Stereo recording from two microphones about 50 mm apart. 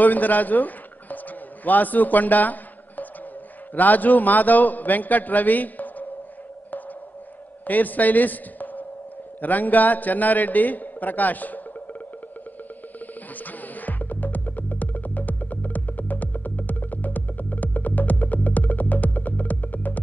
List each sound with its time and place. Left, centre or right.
0.0 s a sound: left
3.7 s a man's voice: left
7.6 s a man's voice: left
13.4 s music: left